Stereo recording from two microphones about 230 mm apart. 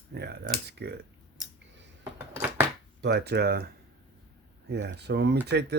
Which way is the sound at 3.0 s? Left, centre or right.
Right.